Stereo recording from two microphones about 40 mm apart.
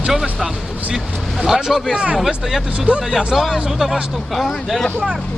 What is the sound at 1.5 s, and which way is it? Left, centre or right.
Speech, centre.